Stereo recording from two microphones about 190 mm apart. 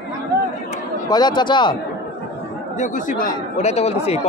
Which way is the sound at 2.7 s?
45° left (ahead or behind).